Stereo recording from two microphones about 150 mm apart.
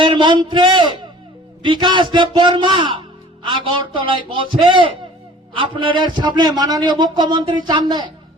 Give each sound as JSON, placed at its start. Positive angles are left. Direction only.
{"t": 0.0, "sound": "a man's voice", "side_deg": -30}